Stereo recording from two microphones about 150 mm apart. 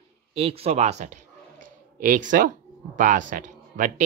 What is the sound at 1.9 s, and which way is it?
Speech, 60° right (ahead or behind).